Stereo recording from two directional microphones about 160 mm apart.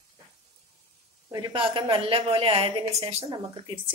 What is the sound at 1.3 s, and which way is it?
A woman's voice, 30° right (ahead or behind).